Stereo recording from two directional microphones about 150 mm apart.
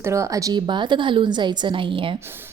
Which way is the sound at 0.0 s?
20° right (ahead or behind).